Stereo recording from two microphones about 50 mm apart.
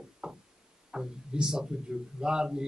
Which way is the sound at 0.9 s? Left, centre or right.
Centre.